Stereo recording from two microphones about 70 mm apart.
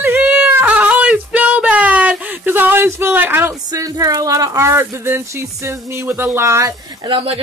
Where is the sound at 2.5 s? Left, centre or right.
Right.